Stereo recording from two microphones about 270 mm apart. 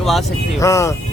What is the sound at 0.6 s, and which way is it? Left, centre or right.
Speech, centre.